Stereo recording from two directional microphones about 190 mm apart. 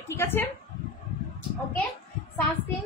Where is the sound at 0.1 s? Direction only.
10° left (ahead or behind).